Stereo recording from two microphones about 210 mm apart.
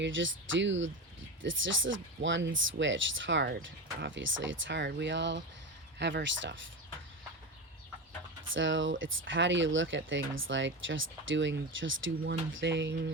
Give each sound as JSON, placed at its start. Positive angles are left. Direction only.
{"t": 0.0, "sound": "speech", "side_deg": -65}
{"t": 8.5, "sound": "speech", "side_deg": -65}